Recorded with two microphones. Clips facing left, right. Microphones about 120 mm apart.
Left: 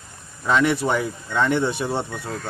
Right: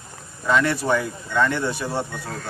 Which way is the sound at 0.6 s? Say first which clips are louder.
Left 1 dB; 20° left (ahead or behind).